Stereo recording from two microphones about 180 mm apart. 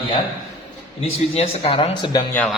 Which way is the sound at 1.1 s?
35° left (ahead or behind).